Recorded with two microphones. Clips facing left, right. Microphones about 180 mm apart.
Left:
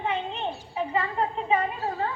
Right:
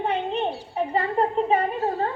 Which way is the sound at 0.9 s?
40° right (ahead or behind).